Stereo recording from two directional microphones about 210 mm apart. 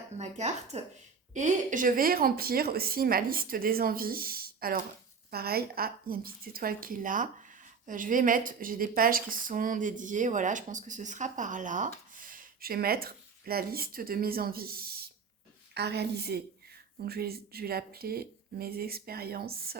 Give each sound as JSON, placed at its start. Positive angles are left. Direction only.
{"t": 0.2, "sound": "speech", "side_deg": -35}